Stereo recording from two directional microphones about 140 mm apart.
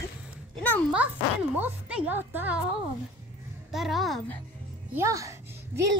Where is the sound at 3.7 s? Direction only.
Centre (ahead or behind).